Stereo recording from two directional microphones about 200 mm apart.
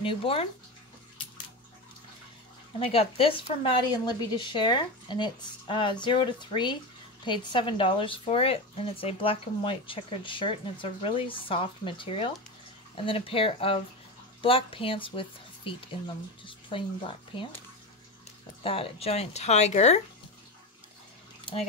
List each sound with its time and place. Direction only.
0.0 s speech: 25° left (ahead or behind)
2.8 s speech: 30° left (ahead or behind)
18.6 s speech: 30° left (ahead or behind)